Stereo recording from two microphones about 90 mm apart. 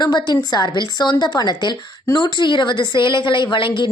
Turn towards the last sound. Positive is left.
turn(degrees=60)  # may be behind; listen again after turning